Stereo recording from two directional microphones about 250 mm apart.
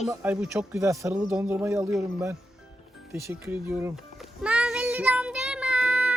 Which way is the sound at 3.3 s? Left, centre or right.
Centre.